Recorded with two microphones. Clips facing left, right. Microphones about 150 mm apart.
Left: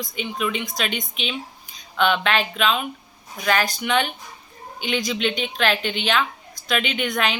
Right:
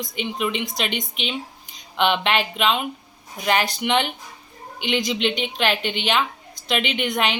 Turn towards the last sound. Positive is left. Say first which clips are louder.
# right 1 dB
turn(degrees=-15)  # may be behind; listen again after turning